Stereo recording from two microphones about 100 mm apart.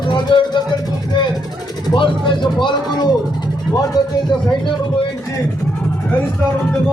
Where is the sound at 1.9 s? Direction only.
55° left (ahead or behind).